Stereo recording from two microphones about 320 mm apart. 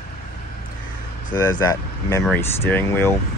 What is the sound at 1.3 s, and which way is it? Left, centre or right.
Speech, centre.